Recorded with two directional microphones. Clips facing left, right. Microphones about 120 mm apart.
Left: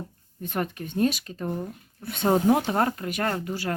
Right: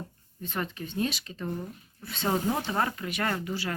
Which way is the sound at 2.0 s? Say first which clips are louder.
Left 7 dB; 50° left (ahead or behind).